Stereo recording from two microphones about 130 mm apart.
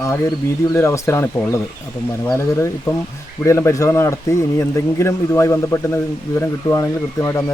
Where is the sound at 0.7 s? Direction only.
20° left (ahead or behind).